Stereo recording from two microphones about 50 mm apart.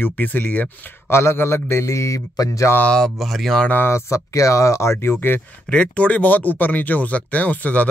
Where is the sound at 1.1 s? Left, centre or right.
Left.